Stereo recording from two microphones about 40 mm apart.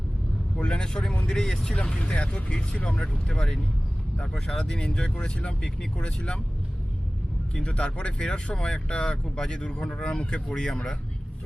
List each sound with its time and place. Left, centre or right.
0.6 s speech: left
7.5 s speech: left